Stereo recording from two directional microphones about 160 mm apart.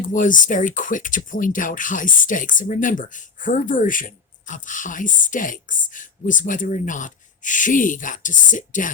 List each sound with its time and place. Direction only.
0.1 s a woman's voice: 55° left (ahead or behind)